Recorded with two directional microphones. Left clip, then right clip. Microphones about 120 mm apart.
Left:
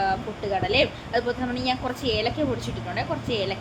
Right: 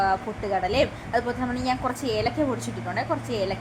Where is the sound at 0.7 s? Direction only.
20° right (ahead or behind).